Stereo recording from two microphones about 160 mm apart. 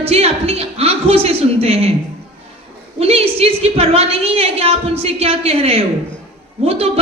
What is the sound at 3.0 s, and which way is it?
A woman's voice, 40° right (ahead or behind).